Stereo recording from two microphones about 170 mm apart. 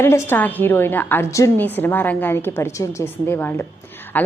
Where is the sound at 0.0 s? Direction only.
15° left (ahead or behind).